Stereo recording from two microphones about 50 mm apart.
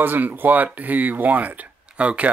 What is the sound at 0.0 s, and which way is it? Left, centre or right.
Speech, right.